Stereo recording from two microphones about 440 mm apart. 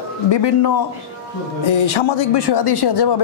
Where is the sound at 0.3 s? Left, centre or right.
Left.